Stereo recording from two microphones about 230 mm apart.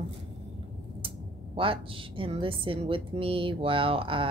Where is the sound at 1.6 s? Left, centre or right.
Right.